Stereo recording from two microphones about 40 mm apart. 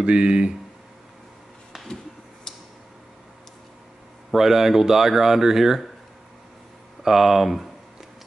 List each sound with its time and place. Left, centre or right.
0.0 s speech: right
2.5 s tick-tock: centre
4.3 s speech: centre
7.0 s speech: centre